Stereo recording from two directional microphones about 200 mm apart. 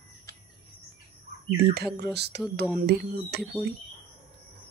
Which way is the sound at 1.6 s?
50° right (ahead or behind).